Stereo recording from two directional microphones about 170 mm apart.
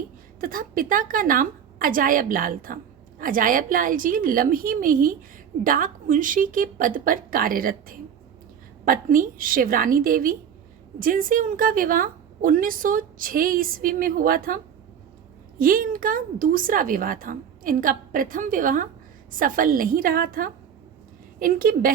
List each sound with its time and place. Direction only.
0.3 s a woman's voice: 55° right (ahead or behind)